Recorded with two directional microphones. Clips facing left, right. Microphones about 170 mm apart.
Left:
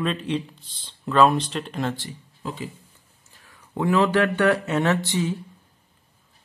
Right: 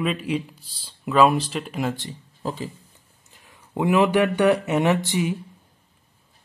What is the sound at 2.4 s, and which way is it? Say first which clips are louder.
Speech: right 3 dB; 40° right (ahead or behind).